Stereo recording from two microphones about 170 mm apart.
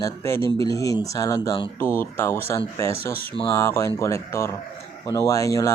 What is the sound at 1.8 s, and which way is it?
Speech, 15° left (ahead or behind).